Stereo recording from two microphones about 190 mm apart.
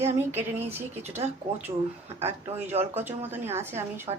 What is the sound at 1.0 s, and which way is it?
Speech, 35° right (ahead or behind).